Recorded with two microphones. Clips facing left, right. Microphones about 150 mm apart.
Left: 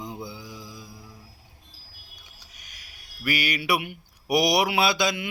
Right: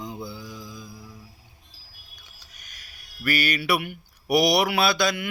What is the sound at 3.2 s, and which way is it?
Speech, 15° left (ahead or behind).